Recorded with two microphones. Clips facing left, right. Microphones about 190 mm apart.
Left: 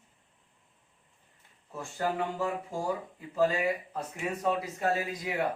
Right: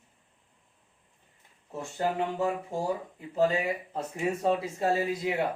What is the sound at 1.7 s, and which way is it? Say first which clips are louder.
Speech: right 2 dB; 25° right (ahead or behind).